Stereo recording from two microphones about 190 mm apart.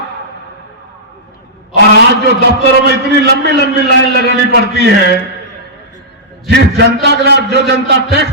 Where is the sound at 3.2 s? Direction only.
60° right (ahead or behind).